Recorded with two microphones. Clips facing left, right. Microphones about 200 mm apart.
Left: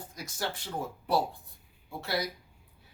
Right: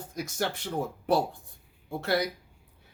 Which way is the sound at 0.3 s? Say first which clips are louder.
Right 4 dB; 65° right (ahead or behind).